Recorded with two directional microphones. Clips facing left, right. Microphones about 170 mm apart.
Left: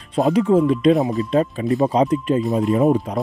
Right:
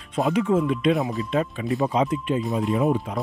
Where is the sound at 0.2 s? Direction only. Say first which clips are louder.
Left 5 dB; 35° left (ahead or behind).